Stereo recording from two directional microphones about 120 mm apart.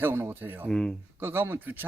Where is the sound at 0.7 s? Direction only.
5° left (ahead or behind).